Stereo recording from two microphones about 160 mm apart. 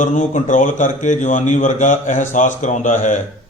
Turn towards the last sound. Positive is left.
turn(degrees=50)  # may be behind; listen again after turning